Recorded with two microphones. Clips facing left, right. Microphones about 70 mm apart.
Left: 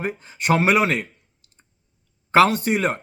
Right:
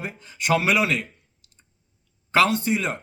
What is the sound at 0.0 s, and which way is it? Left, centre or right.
Speech, left.